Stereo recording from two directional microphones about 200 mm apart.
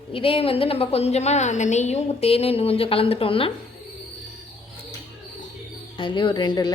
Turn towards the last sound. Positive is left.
turn(degrees=20)  # may be behind; listen again after turning